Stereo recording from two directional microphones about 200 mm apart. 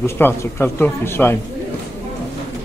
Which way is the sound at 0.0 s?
10° left (ahead or behind).